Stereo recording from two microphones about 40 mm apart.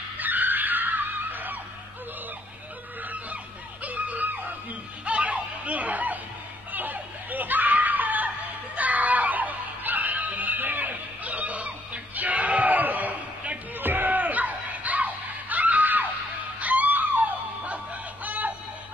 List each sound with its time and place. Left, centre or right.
0.2 s screaming: right
3.8 s screaming: right
5.0 s snicker: right
6.7 s screaming: right
8.7 s music: right